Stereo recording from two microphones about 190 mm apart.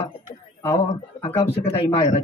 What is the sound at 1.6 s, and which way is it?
Speech, 35° left (ahead or behind).